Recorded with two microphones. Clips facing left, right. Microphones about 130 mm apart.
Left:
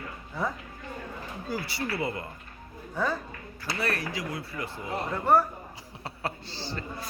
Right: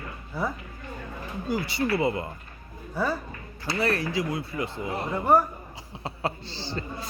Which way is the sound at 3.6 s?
25° right (ahead or behind).